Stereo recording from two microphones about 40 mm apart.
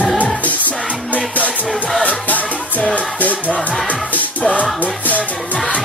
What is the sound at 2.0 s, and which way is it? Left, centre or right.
Music, left.